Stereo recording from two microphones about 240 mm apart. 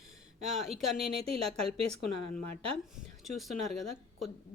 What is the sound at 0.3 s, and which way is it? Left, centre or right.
Speech, right.